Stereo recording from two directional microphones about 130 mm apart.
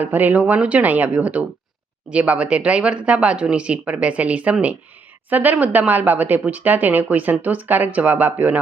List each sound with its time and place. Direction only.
0.0 s speech: 15° right (ahead or behind)